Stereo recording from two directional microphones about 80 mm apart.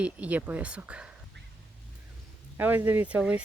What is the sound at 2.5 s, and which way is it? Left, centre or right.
Speech, right.